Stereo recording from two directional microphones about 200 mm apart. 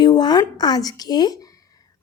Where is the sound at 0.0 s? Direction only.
20° left (ahead or behind).